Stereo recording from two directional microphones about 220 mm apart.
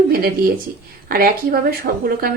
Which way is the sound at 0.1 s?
40° right (ahead or behind).